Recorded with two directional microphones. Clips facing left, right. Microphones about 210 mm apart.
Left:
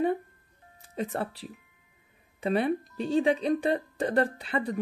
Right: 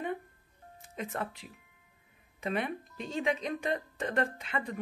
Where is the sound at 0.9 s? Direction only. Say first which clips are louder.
Left 5 dB; 35° left (ahead or behind).